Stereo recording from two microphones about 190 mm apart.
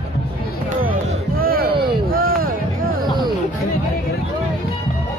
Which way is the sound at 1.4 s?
50° right (ahead or behind).